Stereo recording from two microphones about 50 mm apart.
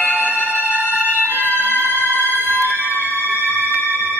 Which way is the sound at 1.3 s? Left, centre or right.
Left.